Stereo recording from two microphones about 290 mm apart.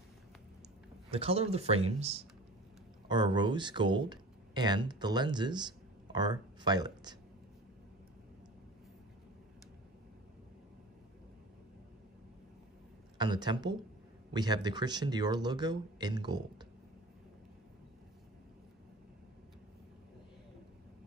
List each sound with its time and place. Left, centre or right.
1.1 s speech: centre
13.2 s speech: centre